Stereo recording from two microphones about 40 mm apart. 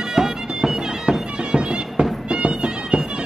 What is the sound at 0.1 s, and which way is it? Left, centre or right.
Bagpipes, centre.